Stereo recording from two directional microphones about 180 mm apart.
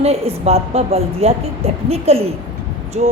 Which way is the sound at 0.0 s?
35° right (ahead or behind).